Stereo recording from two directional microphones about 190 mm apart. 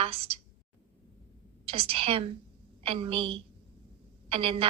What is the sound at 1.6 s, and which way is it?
A woman's voice, 30° right (ahead or behind).